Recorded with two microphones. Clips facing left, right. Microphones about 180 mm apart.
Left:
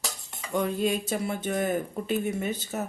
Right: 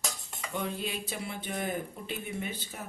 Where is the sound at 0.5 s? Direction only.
45° left (ahead or behind).